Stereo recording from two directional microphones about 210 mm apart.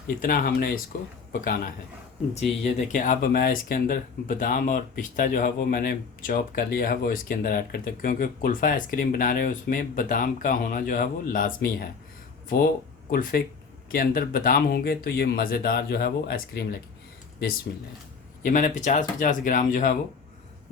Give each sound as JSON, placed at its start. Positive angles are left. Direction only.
{"t": 0.2, "sound": "speech", "side_deg": 40}
{"t": 13.1, "sound": "speech", "side_deg": 45}
{"t": 18.4, "sound": "speech", "side_deg": 40}